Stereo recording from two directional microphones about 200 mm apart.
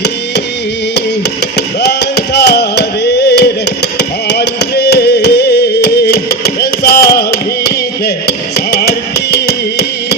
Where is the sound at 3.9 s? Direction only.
55° left (ahead or behind).